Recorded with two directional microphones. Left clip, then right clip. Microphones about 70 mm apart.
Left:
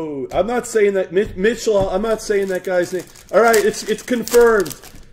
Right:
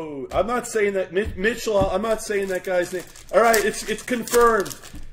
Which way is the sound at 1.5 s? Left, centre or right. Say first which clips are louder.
Left 1 dB; left.